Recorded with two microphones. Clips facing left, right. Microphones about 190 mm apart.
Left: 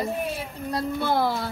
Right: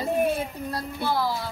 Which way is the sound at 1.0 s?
55° left (ahead or behind).